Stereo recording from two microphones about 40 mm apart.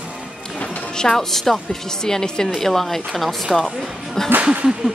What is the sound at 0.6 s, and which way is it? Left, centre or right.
Music, left.